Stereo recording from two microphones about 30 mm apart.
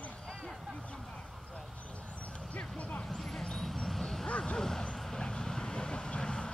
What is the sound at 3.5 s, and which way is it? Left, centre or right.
Vehicle, centre.